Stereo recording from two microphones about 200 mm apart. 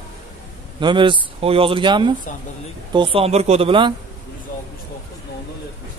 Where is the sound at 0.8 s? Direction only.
25° right (ahead or behind).